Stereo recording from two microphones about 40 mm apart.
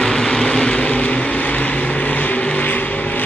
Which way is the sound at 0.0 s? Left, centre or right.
Centre.